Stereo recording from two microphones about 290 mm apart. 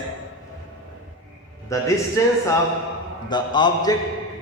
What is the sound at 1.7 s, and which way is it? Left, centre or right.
A man's voice, centre.